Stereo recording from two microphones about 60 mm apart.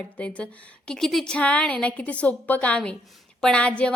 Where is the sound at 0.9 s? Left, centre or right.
Centre.